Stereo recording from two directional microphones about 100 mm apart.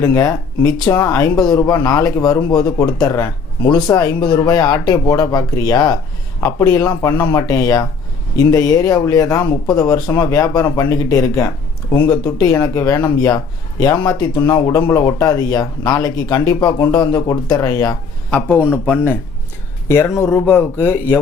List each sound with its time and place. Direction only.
0.0 s speech: 30° left (ahead or behind)
18.3 s speech: 15° left (ahead or behind)